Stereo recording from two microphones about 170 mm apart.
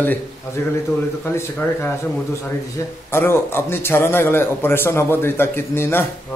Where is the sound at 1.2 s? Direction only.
15° left (ahead or behind).